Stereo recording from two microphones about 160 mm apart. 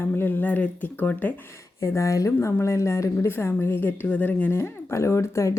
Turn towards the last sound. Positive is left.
turn(degrees=15)  # may be behind; listen again after turning